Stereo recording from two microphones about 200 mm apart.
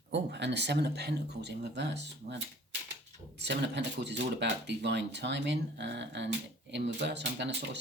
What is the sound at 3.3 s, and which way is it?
Speech, 60° right (ahead or behind).